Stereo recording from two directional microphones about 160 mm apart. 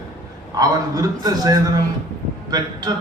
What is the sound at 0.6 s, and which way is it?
A man's voice, 25° right (ahead or behind).